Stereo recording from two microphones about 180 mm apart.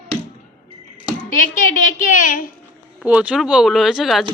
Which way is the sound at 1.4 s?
45° left (ahead or behind).